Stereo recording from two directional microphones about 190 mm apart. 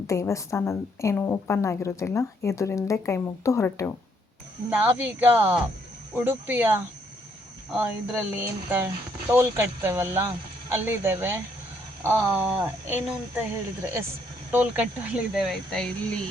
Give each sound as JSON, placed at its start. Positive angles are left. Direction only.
{"t": 0.1, "sound": "a woman's voice", "side_deg": 15}
{"t": 4.7, "sound": "speech", "side_deg": -10}
{"t": 14.5, "sound": "speech", "side_deg": -10}